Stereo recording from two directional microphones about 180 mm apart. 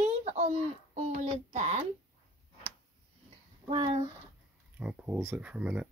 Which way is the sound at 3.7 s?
25° right (ahead or behind).